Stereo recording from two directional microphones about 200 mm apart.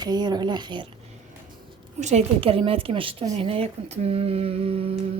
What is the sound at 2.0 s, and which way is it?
A woman's voice, 35° right (ahead or behind).